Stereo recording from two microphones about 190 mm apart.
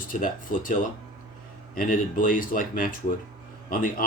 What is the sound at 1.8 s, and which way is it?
Speech, 45° left (ahead or behind).